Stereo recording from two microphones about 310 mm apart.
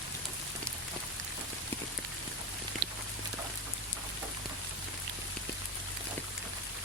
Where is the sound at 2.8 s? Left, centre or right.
Right.